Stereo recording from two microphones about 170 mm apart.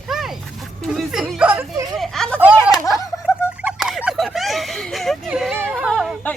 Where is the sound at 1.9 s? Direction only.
Centre (ahead or behind).